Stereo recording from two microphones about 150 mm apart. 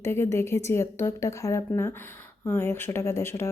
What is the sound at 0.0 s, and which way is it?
Speech, 15° left (ahead or behind).